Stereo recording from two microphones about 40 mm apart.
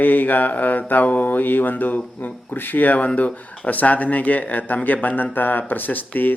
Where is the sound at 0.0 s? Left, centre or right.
Left.